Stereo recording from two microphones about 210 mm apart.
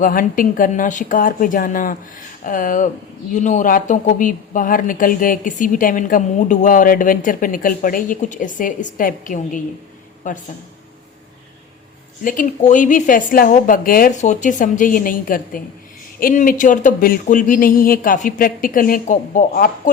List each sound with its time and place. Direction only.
0.0 s a woman's voice: 40° left (ahead or behind)
12.2 s a woman's voice: 40° left (ahead or behind)